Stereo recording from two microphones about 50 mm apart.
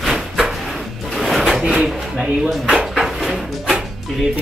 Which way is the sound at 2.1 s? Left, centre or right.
Right.